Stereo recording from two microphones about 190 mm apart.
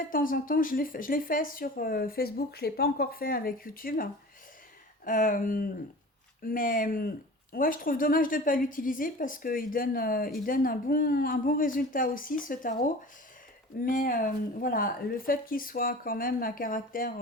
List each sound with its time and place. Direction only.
0.1 s a woman's voice: 45° left (ahead or behind)